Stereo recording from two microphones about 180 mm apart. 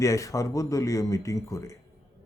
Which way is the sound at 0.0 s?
15° left (ahead or behind).